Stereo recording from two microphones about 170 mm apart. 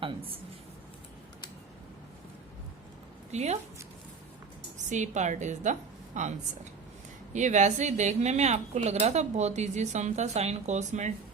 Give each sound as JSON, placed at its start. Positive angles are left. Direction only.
{"t": 3.3, "sound": "speech", "side_deg": -40}
{"t": 4.9, "sound": "a woman's voice", "side_deg": -45}
{"t": 7.3, "sound": "a woman's voice", "side_deg": -45}